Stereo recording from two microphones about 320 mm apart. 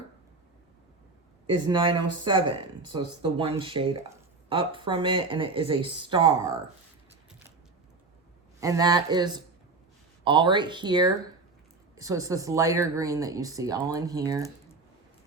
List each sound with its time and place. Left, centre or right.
1.5 s speech: centre
8.6 s speech: centre